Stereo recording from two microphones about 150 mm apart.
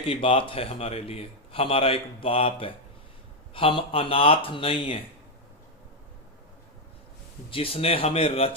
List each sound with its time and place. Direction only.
0.0 s a man's voice: 35° left (ahead or behind)
7.5 s a man's voice: 40° left (ahead or behind)